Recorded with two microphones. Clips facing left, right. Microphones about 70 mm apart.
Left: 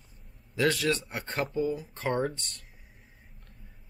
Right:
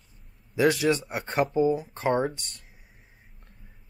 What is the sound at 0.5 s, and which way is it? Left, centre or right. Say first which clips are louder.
Speech: right 4 dB; centre.